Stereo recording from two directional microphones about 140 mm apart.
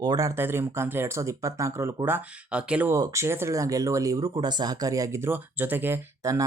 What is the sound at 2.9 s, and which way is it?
Speech, 20° right (ahead or behind).